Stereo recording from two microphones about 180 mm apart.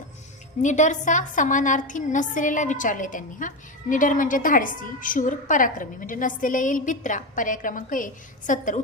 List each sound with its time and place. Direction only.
0.6 s a woman's voice: 45° left (ahead or behind)